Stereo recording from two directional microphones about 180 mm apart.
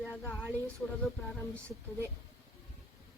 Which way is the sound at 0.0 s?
Centre (ahead or behind).